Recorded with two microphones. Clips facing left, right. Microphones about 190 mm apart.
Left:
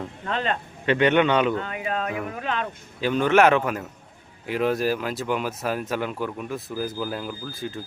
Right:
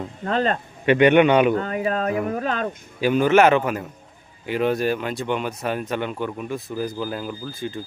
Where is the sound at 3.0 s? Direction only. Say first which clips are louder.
Right 2 dB; 10° right (ahead or behind).